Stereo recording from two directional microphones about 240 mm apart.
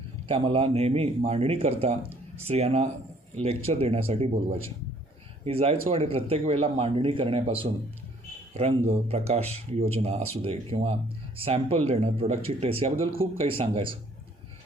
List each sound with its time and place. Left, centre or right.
0.3 s speech: right